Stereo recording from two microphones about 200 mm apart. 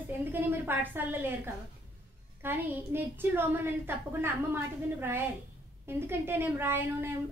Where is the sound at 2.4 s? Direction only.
10° right (ahead or behind).